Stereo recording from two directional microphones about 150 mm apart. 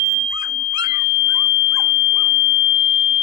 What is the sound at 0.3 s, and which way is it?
Dog, 30° right (ahead or behind).